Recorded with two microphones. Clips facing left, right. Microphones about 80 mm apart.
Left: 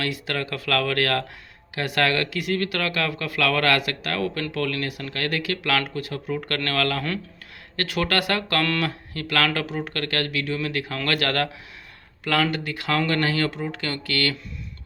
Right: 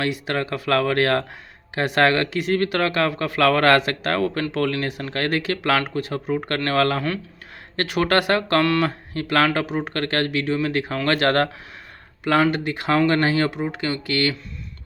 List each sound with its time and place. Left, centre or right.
0.0 s speech: right